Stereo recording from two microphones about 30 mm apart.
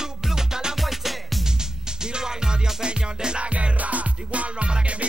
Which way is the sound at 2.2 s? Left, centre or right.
Right.